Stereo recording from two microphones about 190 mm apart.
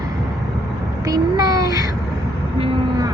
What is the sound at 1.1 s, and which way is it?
Speech, 20° right (ahead or behind).